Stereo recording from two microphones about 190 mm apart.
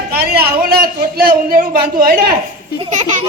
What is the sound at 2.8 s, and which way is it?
Baby laughter, 40° right (ahead or behind).